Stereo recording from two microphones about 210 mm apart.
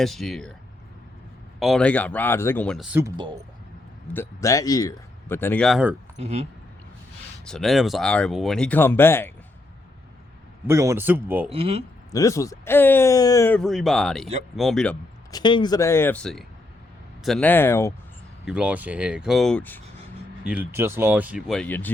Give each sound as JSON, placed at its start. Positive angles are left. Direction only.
{"t": 0.0, "sound": "speech", "side_deg": 0}
{"t": 1.5, "sound": "speech", "side_deg": 0}
{"t": 4.1, "sound": "a man's voice", "side_deg": 10}
{"t": 6.1, "sound": "speech", "side_deg": -30}
{"t": 7.4, "sound": "speech", "side_deg": 0}
{"t": 10.7, "sound": "speech", "side_deg": -15}
{"t": 11.5, "sound": "speech", "side_deg": -30}
{"t": 12.1, "sound": "a man's voice", "side_deg": 15}
{"t": 15.3, "sound": "a man's voice", "side_deg": 20}
{"t": 18.4, "sound": "speech", "side_deg": -5}
{"t": 20.4, "sound": "speech", "side_deg": -5}